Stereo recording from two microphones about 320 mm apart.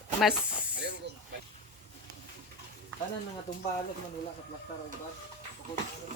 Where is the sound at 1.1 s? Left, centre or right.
Right.